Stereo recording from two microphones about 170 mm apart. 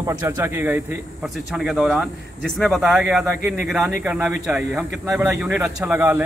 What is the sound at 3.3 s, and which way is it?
Speech, 15° right (ahead or behind).